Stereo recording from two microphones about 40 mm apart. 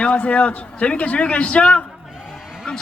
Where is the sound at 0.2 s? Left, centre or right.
Left.